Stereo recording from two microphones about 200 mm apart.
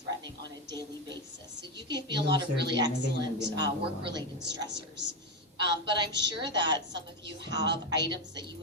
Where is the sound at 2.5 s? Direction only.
60° right (ahead or behind).